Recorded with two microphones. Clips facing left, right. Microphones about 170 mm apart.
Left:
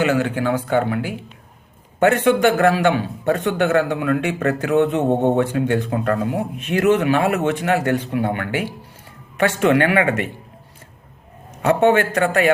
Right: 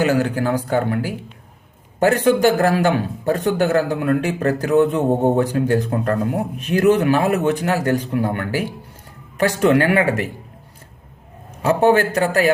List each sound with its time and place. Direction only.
0.0 s speech: 35° right (ahead or behind)
2.7 s a man's voice: 50° right (ahead or behind)
3.2 s speech: 35° right (ahead or behind)
11.6 s speech: 35° right (ahead or behind)